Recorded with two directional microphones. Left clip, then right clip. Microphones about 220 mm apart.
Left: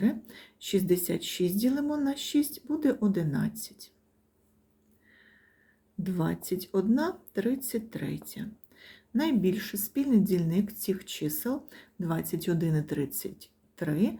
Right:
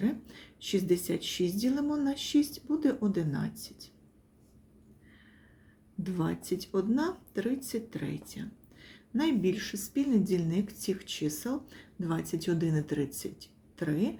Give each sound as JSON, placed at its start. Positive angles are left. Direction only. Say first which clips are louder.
{"t": 0.0, "sound": "speech", "louder": "left 3 dB", "side_deg": 20}
{"t": 6.0, "sound": "speech", "louder": "left 2 dB", "side_deg": 15}